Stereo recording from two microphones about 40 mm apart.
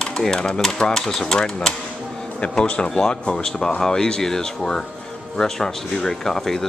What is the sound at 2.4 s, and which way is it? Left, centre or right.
Speech, left.